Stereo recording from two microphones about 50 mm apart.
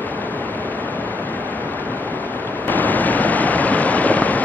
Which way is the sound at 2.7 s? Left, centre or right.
Left.